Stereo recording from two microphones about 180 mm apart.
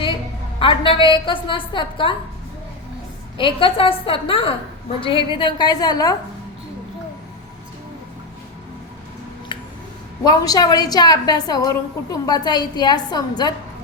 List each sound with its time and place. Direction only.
0.6 s a woman's voice: 30° left (ahead or behind)
3.3 s a woman's voice: 30° left (ahead or behind)
9.5 s a sound: 30° left (ahead or behind)
10.2 s a woman's voice: 20° left (ahead or behind)